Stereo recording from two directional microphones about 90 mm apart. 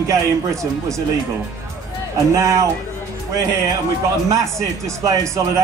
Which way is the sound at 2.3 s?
35° right (ahead or behind).